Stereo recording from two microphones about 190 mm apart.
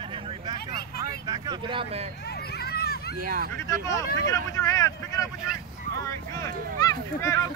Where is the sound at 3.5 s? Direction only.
15° left (ahead or behind).